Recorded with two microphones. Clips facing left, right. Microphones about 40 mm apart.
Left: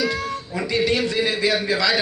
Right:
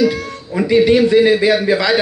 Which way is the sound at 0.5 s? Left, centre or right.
Right.